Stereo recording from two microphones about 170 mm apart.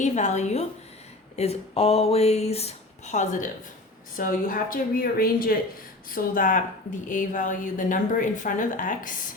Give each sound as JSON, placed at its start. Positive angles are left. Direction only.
{"t": 0.0, "sound": "a woman's voice", "side_deg": 45}